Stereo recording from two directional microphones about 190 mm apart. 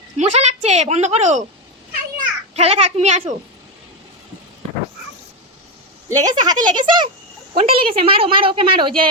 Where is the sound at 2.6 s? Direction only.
35° right (ahead or behind).